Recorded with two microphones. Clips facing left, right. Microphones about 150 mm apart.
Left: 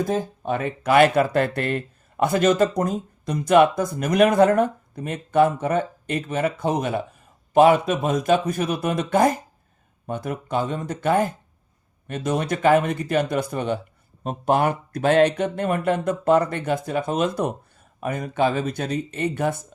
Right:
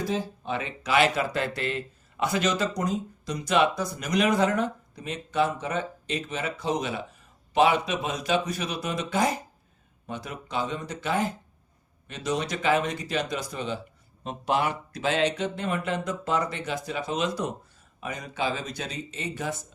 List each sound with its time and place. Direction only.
0.0 s speech: 50° left (ahead or behind)